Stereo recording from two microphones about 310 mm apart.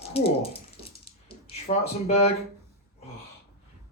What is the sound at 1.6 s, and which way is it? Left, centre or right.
Speech, centre.